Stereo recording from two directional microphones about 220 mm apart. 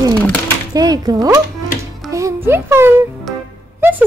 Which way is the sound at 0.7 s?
15° right (ahead or behind).